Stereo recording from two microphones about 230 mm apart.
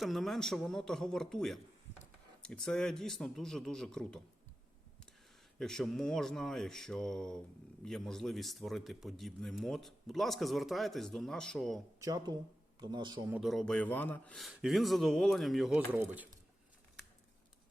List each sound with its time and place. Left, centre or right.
0.0 s a man's voice: centre
5.5 s a man's voice: centre
11.9 s a man's voice: centre
13.3 s a man's voice: centre